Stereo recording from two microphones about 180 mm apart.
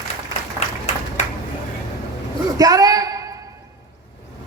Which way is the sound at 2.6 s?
20° right (ahead or behind).